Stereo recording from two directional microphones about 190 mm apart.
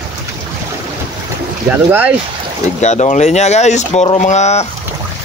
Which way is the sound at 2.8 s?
35° left (ahead or behind).